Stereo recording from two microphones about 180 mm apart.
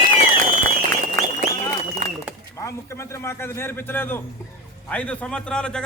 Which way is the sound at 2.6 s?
15° left (ahead or behind).